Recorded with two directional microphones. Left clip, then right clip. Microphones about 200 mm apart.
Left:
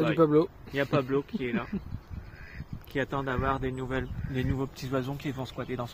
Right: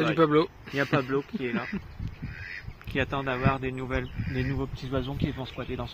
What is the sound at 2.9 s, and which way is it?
Speech, 40° right (ahead or behind).